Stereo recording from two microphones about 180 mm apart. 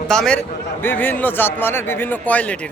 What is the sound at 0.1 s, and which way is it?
A man's voice, 5° left (ahead or behind).